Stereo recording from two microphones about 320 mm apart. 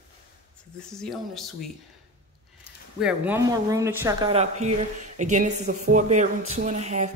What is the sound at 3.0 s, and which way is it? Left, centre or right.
Speech, centre.